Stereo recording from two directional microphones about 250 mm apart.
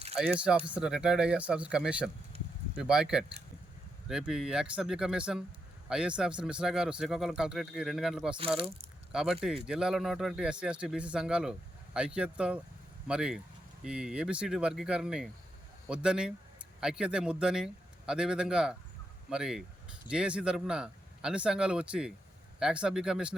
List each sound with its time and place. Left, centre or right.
0.2 s speech: centre
8.5 s speech: right
9.1 s speech: centre